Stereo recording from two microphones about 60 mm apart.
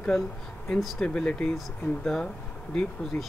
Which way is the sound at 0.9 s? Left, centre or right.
Centre.